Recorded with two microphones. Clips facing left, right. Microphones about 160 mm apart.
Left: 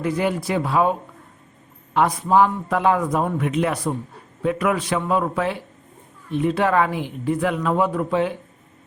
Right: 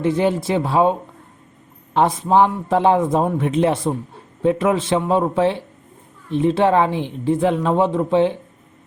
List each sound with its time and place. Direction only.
0.0 s a man's voice: 25° right (ahead or behind)